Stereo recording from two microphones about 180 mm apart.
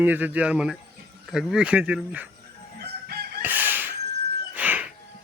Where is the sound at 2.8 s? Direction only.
60° right (ahead or behind).